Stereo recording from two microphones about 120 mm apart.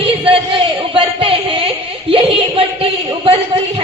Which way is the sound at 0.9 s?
50° right (ahead or behind).